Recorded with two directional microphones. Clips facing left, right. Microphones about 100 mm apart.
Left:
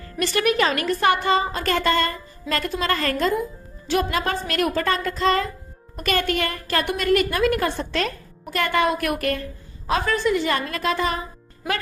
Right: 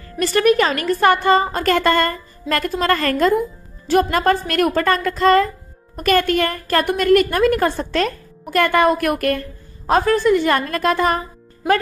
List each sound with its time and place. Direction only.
0.2 s a woman's voice: 40° right (ahead or behind)